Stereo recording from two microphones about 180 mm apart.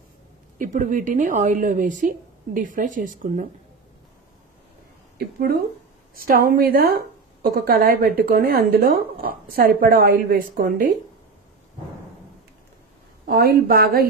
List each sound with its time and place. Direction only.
0.6 s speech: 45° right (ahead or behind)
6.1 s speech: 55° right (ahead or behind)
13.2 s speech: 60° right (ahead or behind)